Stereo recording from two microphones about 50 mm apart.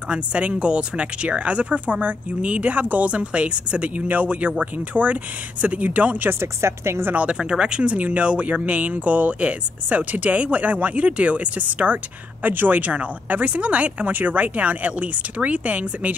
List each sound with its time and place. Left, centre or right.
0.1 s speech: right
6.4 s a woman's voice: right
7.3 s speech: centre